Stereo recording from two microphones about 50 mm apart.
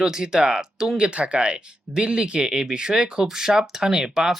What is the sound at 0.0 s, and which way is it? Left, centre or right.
Speech, centre.